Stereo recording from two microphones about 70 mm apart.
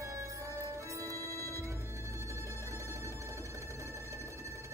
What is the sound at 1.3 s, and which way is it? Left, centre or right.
Music, left.